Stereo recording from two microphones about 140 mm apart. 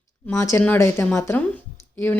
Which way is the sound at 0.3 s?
20° left (ahead or behind).